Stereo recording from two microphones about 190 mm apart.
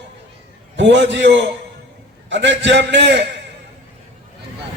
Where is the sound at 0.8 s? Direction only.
70° right (ahead or behind).